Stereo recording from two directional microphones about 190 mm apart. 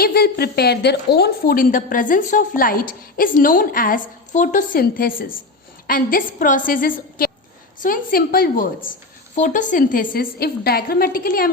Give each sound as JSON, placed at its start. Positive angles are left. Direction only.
{"t": 0.0, "sound": "a woman's voice", "side_deg": 55}